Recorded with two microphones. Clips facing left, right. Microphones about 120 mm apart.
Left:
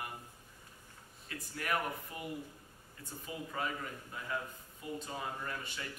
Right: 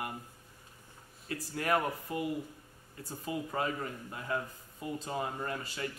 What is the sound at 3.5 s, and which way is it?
A man's voice, 35° right (ahead or behind).